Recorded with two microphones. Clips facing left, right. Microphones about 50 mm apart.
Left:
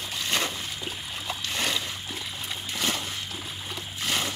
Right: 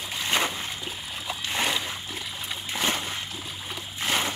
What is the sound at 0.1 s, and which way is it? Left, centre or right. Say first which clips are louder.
Splash: right 3 dB; right.